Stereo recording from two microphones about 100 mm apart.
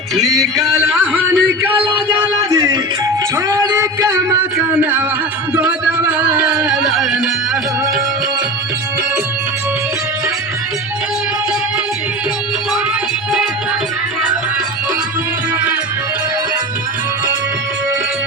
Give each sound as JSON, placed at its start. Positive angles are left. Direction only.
{"t": 0.2, "sound": "music", "side_deg": 0}
{"t": 1.1, "sound": "speech", "side_deg": -15}
{"t": 2.3, "sound": "a sound", "side_deg": -40}
{"t": 4.4, "sound": "speech", "side_deg": -20}
{"t": 5.5, "sound": "music", "side_deg": -10}